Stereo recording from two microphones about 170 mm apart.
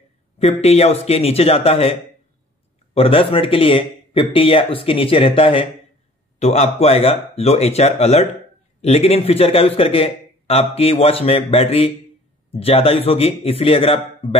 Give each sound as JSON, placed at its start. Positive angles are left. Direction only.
{"t": 0.4, "sound": "a man's voice", "side_deg": 40}